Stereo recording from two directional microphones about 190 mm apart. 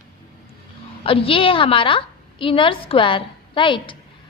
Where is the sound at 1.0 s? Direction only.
30° left (ahead or behind).